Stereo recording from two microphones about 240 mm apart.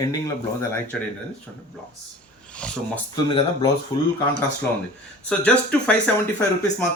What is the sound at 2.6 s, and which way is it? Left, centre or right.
Speech, centre.